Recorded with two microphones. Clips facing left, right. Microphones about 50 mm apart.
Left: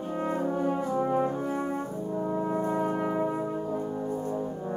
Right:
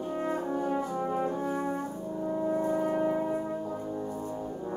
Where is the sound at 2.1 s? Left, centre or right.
Left.